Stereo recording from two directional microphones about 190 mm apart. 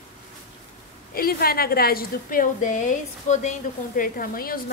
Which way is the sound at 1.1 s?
50° left (ahead or behind).